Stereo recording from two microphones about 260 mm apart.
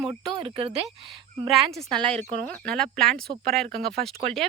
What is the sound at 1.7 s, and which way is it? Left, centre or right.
Speech, centre.